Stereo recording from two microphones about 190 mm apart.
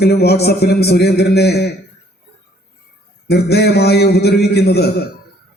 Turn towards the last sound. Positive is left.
turn(degrees=60)  # may be behind; listen again after turning